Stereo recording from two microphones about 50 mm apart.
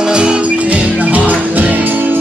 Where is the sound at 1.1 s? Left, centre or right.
Right.